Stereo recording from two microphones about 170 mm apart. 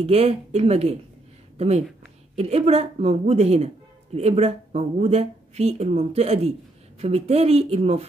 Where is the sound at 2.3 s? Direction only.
40° right (ahead or behind).